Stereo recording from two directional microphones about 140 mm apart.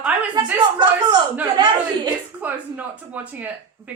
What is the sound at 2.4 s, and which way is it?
Speech, 10° right (ahead or behind).